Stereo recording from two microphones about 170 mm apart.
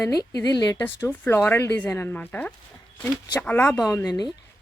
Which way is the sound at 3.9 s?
20° left (ahead or behind).